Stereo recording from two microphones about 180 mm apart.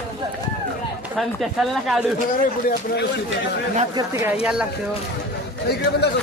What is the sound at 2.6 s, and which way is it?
Speech, 65° left (ahead or behind).